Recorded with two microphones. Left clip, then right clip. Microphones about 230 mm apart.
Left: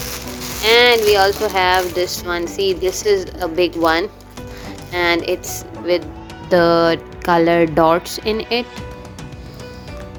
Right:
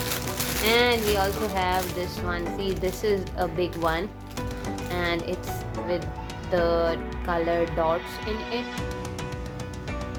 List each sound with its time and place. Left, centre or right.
0.6 s speech: left
6.5 s speech: left